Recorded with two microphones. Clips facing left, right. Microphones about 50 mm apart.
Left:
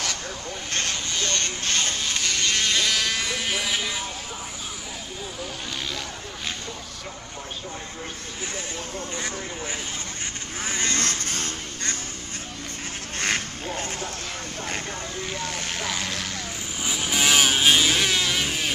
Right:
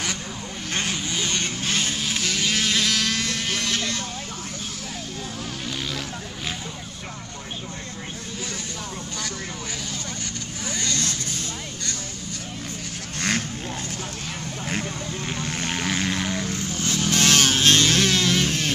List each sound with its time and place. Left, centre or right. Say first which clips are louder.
0.7 s vehicle: right 2 dB; centre
10.6 s vehicle: left 2 dB; left
15.6 s vehicle: right 4 dB; centre
16.5 s vehicle: right 3 dB; centre